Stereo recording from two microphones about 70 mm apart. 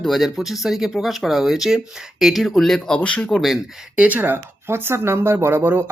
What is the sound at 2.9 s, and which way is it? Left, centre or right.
Speech, centre.